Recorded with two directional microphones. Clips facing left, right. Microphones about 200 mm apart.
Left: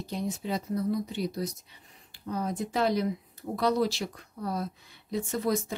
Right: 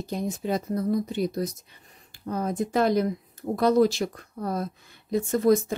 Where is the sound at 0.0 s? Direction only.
50° right (ahead or behind).